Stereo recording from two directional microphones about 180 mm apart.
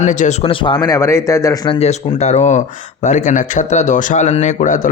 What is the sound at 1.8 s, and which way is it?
Speech, 40° left (ahead or behind).